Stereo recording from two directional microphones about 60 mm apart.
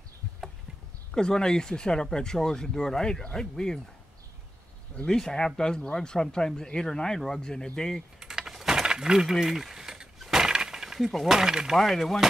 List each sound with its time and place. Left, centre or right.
1.1 s speech: centre
4.9 s speech: centre
8.2 s coin: centre
11.7 s speech: centre